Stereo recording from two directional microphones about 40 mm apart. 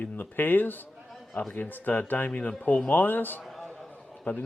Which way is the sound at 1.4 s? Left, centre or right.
Left.